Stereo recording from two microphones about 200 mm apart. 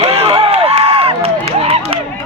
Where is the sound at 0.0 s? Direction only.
30° right (ahead or behind).